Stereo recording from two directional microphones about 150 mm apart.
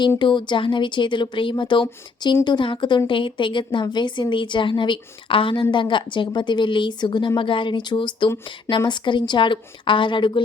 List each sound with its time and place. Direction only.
0.2 s a woman's voice: 30° left (ahead or behind)